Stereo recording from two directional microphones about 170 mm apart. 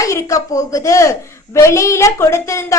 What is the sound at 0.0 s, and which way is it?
A woman's voice, 20° left (ahead or behind).